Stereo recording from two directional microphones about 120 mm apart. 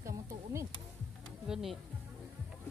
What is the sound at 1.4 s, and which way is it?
Speech, 5° right (ahead or behind).